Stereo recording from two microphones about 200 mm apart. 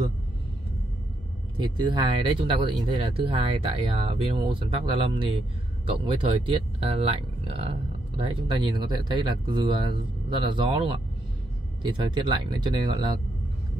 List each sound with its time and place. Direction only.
1.6 s speech: 20° right (ahead or behind)